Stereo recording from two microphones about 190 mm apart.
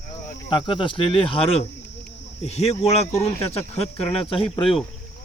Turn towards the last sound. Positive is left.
turn(degrees=30)  # may be behind; listen again after turning